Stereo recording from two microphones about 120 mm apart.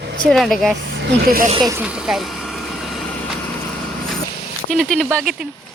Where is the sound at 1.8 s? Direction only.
5° right (ahead or behind).